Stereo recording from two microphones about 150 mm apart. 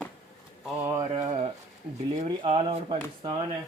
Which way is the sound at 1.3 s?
40° right (ahead or behind).